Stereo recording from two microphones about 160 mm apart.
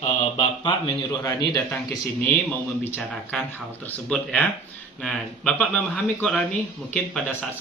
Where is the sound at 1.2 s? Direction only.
20° left (ahead or behind).